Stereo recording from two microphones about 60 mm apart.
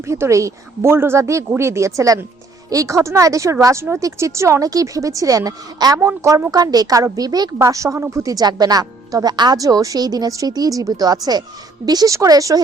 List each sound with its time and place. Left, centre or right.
0.1 s speech: right
4.7 s a woman's voice: right
11.9 s speech: right